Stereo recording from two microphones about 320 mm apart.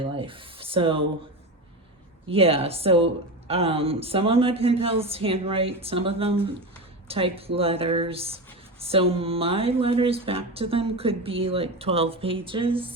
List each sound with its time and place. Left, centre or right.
0.0 s speech: centre
2.3 s speech: centre